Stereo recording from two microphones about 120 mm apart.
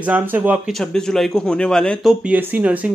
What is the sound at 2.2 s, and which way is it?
Speech, 10° right (ahead or behind).